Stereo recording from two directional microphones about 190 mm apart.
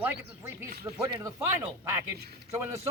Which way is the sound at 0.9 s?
15° right (ahead or behind).